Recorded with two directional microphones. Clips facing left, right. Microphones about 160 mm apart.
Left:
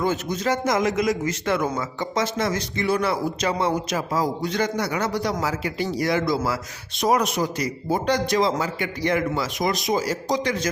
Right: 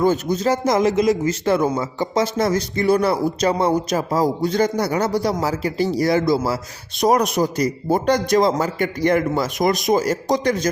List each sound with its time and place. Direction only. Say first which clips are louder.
0.0 s a man's voice: right 6 dB; 35° right (ahead or behind)